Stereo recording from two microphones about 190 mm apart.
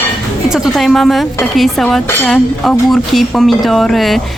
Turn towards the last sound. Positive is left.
turn(degrees=0)  # may be behind; listen again after turning